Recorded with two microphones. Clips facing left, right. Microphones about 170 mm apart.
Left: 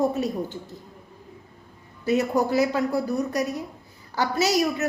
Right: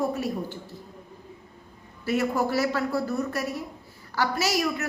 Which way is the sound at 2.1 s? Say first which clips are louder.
Left 3 dB; 20° left (ahead or behind).